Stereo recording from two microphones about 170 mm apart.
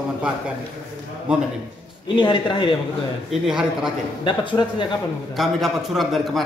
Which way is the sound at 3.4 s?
5° right (ahead or behind).